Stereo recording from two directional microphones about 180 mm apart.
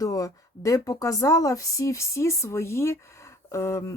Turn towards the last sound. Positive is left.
turn(degrees=15)  # may be behind; listen again after turning